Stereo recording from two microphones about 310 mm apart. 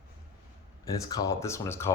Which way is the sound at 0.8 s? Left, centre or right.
Centre.